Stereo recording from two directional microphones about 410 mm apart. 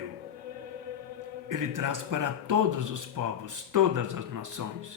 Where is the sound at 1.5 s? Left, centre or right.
Right.